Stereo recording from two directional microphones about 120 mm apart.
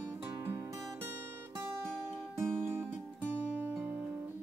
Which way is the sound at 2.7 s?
20° right (ahead or behind).